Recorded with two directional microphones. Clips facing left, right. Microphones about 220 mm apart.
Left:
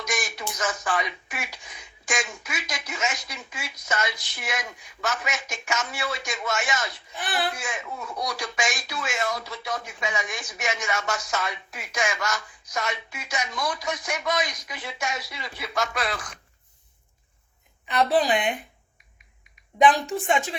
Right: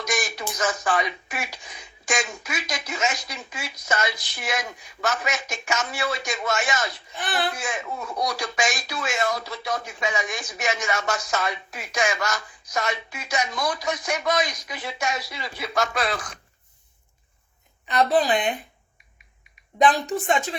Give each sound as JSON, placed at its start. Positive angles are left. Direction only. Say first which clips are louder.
{"t": 0.0, "sound": "speech", "louder": "right 3 dB", "side_deg": -35}
{"t": 17.8, "sound": "a woman's voice", "louder": "right 1 dB", "side_deg": 10}
{"t": 19.8, "sound": "a woman's voice", "louder": "even", "side_deg": 10}